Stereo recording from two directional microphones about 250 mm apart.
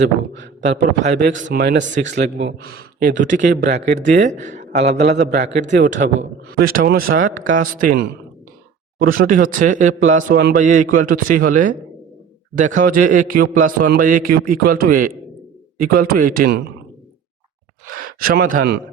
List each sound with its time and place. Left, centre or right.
0.6 s a man's voice: right
1.5 s a man's voice: right
3.5 s a man's voice: right
3.8 s a man's voice: right
5.4 s a man's voice: right
5.7 s a man's voice: right
17.8 s speech: right